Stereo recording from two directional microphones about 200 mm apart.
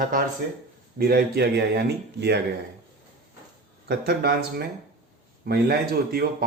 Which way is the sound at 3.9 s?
55° right (ahead or behind).